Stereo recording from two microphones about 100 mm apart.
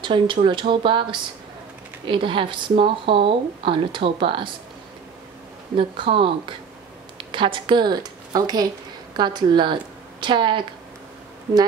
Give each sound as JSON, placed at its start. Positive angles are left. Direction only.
{"t": 0.0, "sound": "a woman's voice", "side_deg": -55}
{"t": 5.8, "sound": "a woman's voice", "side_deg": -60}
{"t": 7.3, "sound": "a woman's voice", "side_deg": -55}